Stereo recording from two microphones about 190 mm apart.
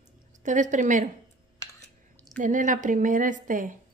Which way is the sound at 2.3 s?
45° right (ahead or behind).